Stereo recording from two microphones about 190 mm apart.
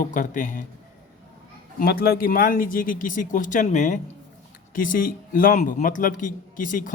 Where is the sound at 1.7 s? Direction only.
55° left (ahead or behind).